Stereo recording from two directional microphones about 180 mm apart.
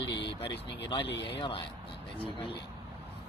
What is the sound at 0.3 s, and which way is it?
Speech, 30° left (ahead or behind).